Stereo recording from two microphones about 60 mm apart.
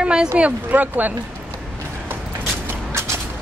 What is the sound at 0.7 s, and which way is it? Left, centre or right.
Speech, right.